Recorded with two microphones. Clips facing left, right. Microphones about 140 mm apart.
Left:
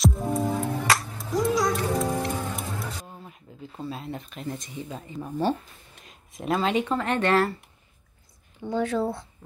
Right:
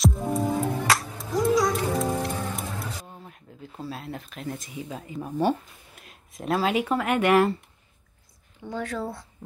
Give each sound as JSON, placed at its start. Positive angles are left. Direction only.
{"t": 0.0, "sound": "music", "side_deg": 0}
{"t": 3.1, "sound": "speech", "side_deg": 0}
{"t": 8.6, "sound": "speech", "side_deg": 25}